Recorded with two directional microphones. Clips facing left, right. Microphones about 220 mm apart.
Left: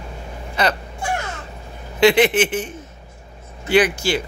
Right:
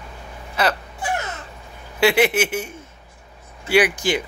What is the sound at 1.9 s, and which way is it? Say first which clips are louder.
Speech: left 3 dB; 10° right (ahead or behind).